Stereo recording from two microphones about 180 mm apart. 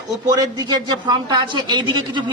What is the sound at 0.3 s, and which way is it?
A man's voice, 20° right (ahead or behind).